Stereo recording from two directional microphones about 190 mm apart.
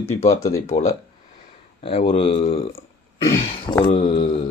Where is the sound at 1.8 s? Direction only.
30° left (ahead or behind).